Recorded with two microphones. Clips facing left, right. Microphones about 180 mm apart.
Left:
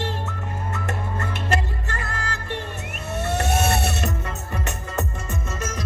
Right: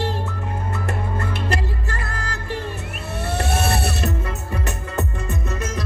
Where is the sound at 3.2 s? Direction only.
35° right (ahead or behind).